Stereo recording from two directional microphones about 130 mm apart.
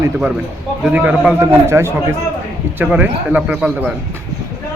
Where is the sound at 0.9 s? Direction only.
10° right (ahead or behind).